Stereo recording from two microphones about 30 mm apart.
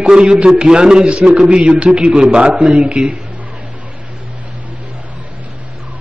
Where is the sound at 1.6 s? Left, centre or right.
Right.